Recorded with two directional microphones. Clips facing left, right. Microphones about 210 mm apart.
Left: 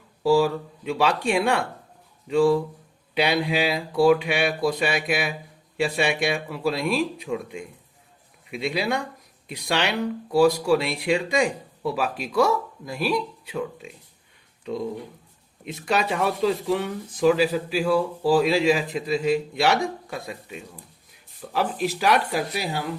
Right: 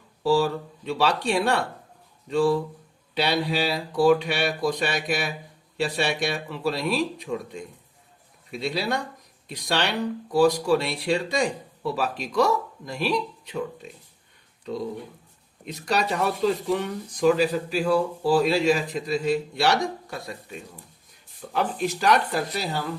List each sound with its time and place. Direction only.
0.2 s speech: 10° left (ahead or behind)
15.6 s speech: 5° left (ahead or behind)